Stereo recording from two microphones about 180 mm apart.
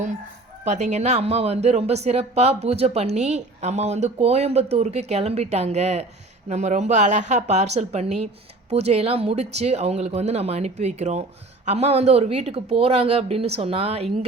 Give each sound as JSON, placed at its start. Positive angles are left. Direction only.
{"t": 0.7, "sound": "speech", "side_deg": -40}